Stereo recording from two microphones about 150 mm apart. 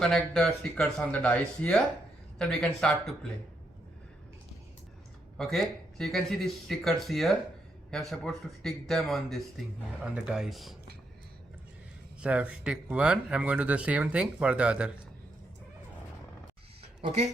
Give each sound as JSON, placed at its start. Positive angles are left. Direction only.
{"t": 0.0, "sound": "speech", "side_deg": 0}
{"t": 5.4, "sound": "speech", "side_deg": 0}
{"t": 12.2, "sound": "speech", "side_deg": -10}
{"t": 17.0, "sound": "speech", "side_deg": -45}